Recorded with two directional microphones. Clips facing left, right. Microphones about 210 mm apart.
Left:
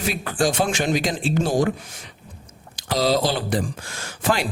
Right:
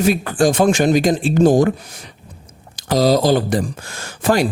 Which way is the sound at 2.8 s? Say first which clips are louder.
Right 6 dB; 45° right (ahead or behind).